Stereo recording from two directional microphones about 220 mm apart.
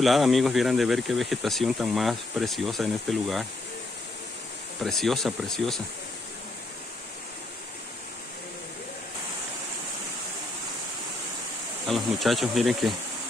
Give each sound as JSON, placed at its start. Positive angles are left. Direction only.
{"t": 0.0, "sound": "speech", "side_deg": 0}
{"t": 4.8, "sound": "speech", "side_deg": 0}
{"t": 11.9, "sound": "speech", "side_deg": 0}